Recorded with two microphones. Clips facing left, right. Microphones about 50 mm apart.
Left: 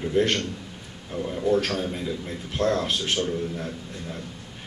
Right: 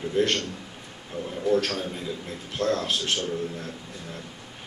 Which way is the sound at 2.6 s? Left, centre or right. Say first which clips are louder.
Left 2 dB; left.